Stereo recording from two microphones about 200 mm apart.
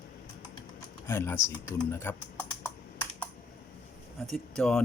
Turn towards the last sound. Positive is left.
turn(degrees=0)  # may be behind; listen again after turning